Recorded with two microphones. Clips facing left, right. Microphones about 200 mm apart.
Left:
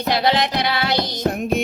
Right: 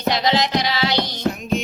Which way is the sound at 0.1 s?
60° left (ahead or behind).